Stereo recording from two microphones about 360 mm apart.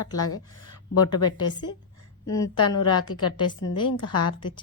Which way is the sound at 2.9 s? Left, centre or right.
Left.